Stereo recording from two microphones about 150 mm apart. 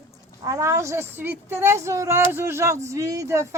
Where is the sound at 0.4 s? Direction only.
20° right (ahead or behind).